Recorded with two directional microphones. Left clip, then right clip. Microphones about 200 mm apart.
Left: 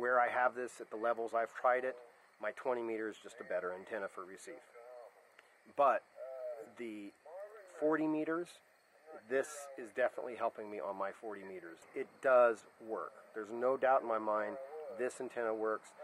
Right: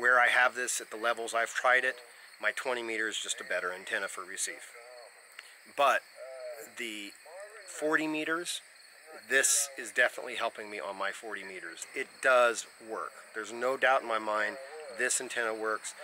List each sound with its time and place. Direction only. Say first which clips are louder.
0.0 s speech: right 8 dB; 5° left (ahead or behind)
5.8 s speech: right 4 dB; 5° left (ahead or behind)
12.8 s speech: right 3 dB; 20° left (ahead or behind)
13.3 s speech: right 2 dB; 5° left (ahead or behind)